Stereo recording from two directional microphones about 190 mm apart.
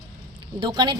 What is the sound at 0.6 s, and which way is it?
Speech, 25° right (ahead or behind).